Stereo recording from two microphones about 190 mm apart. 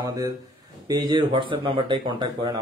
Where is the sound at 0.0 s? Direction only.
20° right (ahead or behind).